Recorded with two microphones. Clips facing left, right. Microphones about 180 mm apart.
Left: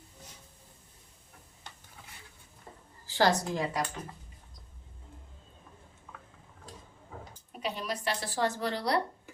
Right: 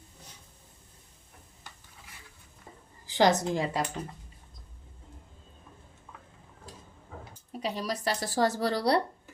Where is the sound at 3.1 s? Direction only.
20° right (ahead or behind).